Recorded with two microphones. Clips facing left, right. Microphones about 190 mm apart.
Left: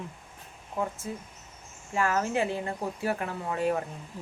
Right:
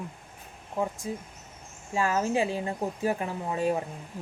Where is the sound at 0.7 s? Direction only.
15° right (ahead or behind).